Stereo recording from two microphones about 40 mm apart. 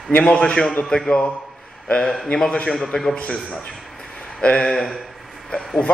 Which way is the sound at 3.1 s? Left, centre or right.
Left.